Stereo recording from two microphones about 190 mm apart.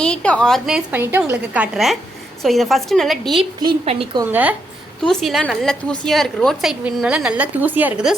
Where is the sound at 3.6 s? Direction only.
25° right (ahead or behind).